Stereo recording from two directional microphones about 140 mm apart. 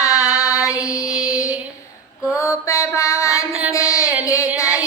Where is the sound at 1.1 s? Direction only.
5° right (ahead or behind).